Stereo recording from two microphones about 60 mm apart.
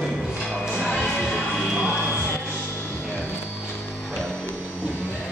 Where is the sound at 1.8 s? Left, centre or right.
Right.